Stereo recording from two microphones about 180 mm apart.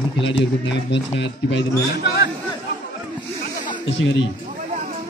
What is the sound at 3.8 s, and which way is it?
Speech, 90° left.